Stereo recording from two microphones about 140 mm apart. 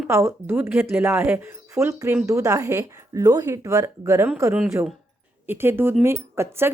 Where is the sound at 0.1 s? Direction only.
20° right (ahead or behind).